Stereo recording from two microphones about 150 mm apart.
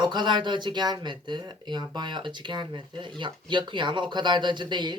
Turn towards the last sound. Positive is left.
turn(degrees=-30)  # may be behind; listen again after turning